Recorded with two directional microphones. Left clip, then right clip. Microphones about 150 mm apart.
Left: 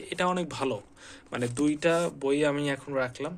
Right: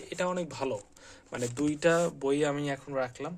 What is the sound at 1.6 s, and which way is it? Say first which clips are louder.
Speech: even; 35° right (ahead or behind).